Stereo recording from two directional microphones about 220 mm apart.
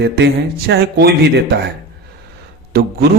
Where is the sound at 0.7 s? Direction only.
45° right (ahead or behind).